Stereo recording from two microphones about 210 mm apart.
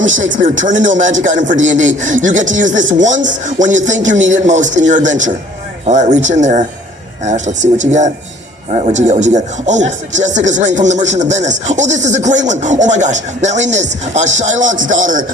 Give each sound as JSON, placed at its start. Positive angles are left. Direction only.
{"t": 0.6, "sound": "speech", "side_deg": -35}